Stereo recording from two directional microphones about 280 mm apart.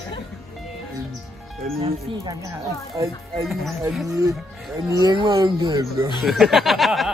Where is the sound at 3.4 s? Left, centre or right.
Centre.